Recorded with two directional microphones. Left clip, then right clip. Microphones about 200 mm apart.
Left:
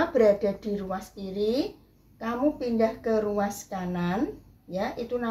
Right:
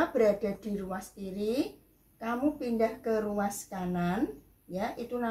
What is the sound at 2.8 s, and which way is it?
Speech, 25° left (ahead or behind).